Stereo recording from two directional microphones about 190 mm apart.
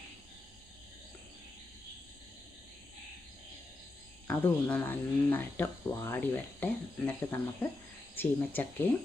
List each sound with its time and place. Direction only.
4.3 s speech: 10° left (ahead or behind)